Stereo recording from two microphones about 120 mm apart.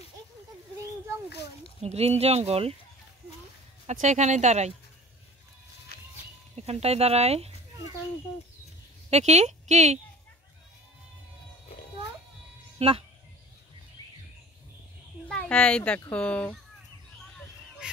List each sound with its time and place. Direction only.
1.8 s speech: 60° right (ahead or behind)
3.8 s speech: 80° right
6.5 s speech: 60° right (ahead or behind)
9.1 s speech: 65° right (ahead or behind)
12.7 s speech: 55° right (ahead or behind)
15.2 s speech: 10° left (ahead or behind)
17.8 s goose: 5° right (ahead or behind)